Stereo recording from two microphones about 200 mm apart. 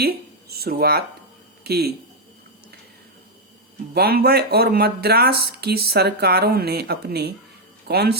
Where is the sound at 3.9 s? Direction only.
50° right (ahead or behind).